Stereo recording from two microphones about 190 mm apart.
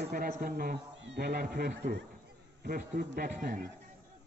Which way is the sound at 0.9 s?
65° right (ahead or behind).